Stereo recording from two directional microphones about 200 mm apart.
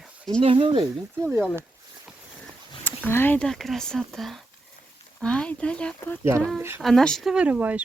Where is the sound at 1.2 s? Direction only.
10° right (ahead or behind).